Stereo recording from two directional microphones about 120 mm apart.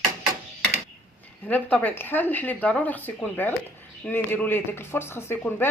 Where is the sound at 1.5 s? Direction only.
15° left (ahead or behind).